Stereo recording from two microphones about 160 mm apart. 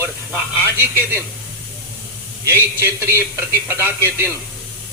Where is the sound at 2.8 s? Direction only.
15° right (ahead or behind).